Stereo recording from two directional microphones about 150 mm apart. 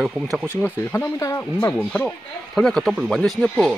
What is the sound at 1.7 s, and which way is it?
Speech, 10° left (ahead or behind).